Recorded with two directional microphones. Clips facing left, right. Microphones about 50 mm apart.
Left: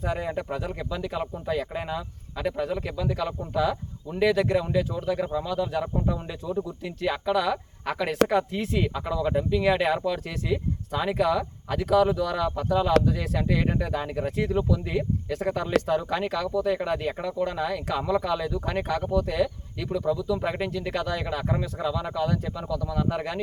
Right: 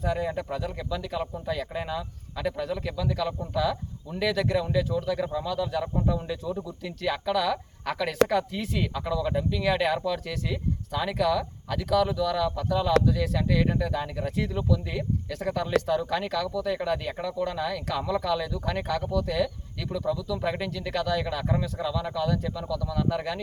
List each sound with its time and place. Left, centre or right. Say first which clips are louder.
0.0 s speech: even; centre